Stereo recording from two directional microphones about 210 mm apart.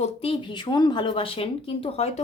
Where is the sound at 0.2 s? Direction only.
25° left (ahead or behind).